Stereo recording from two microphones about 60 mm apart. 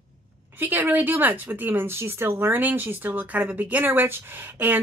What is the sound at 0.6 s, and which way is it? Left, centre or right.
Speech, right.